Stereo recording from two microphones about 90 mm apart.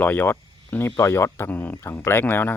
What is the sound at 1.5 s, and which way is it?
Speech, 20° left (ahead or behind).